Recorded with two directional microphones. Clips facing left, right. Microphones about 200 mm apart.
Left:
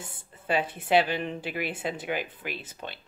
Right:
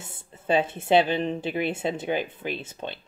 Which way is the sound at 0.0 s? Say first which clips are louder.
Right 4 dB; 25° right (ahead or behind).